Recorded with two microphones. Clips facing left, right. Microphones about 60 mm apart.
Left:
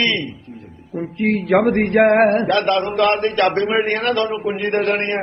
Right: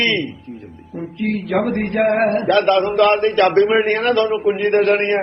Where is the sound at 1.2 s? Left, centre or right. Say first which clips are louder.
Left 3 dB; left.